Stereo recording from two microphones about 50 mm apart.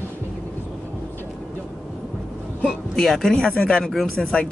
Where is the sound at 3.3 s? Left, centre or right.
Centre.